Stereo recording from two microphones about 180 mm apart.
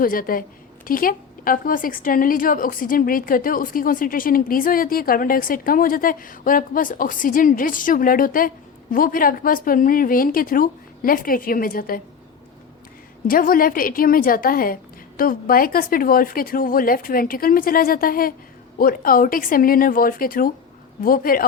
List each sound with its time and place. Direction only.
0.0 s a woman's voice: 50° left (ahead or behind)
13.2 s a woman's voice: 50° left (ahead or behind)